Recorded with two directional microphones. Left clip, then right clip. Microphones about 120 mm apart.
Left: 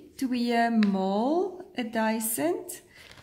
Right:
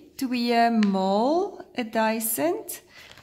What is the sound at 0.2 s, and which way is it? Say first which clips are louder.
A woman's voice: right 4 dB; 25° right (ahead or behind).